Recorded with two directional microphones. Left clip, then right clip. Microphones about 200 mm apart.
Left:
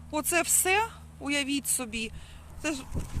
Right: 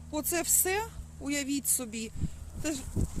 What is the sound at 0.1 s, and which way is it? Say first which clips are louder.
Speech: left 4 dB; centre (ahead or behind).